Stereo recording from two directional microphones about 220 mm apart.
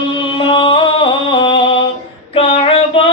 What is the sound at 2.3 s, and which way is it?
Child singing, 25° left (ahead or behind).